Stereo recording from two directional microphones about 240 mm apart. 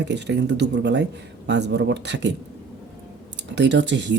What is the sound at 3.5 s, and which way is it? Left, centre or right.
Speech, right.